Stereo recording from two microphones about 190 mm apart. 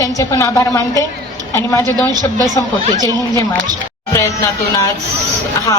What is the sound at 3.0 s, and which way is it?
Speech, 20° right (ahead or behind).